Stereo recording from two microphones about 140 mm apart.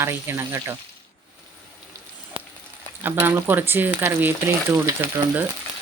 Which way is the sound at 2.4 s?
40° right (ahead or behind).